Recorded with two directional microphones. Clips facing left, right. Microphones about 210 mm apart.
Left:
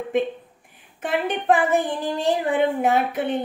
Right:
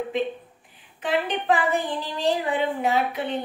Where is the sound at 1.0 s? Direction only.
50° left (ahead or behind).